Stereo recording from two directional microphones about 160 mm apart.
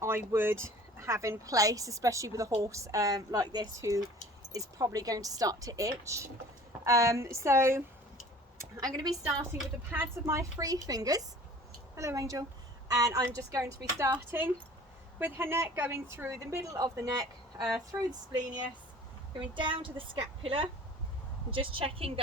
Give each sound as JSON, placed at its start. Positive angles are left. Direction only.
{"t": 0.3, "sound": "a woman's voice", "side_deg": -15}
{"t": 19.5, "sound": "a woman's voice", "side_deg": -30}